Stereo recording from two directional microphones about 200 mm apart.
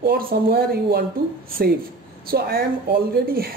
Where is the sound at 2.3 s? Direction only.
50° right (ahead or behind).